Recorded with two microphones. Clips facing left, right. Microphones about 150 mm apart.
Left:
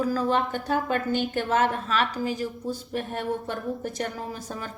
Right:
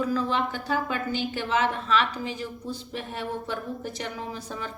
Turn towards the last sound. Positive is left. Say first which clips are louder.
# left 4 dB
turn(degrees=50)  # may be behind; listen again after turning